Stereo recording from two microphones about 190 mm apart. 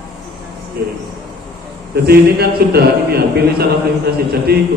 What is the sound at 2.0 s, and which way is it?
A man's voice, 55° right (ahead or behind).